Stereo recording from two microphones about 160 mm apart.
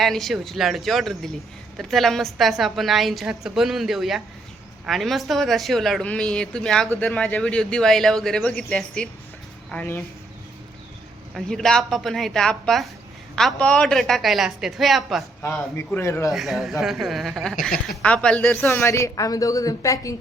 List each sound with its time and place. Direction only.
0.0 s a woman's voice: centre (ahead or behind)
11.3 s a woman's voice: centre (ahead or behind)
15.4 s a man's voice: 10° left (ahead or behind)
16.3 s a woman's voice: centre (ahead or behind)
18.7 s a woman's voice: 15° left (ahead or behind)